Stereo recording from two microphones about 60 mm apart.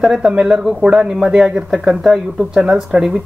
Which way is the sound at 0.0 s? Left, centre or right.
Centre.